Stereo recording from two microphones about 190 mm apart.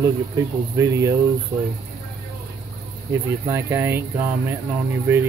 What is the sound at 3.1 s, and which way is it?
Speech, 15° right (ahead or behind).